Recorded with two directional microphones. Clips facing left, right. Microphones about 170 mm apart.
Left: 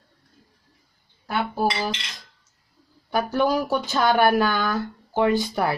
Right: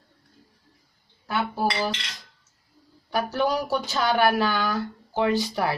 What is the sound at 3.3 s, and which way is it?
Speech, 50° left (ahead or behind).